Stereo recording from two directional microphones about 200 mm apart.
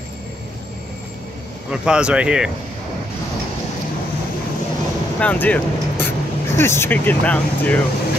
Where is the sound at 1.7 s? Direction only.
5° right (ahead or behind).